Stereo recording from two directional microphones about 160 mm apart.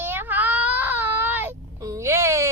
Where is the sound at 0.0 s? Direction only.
15° right (ahead or behind).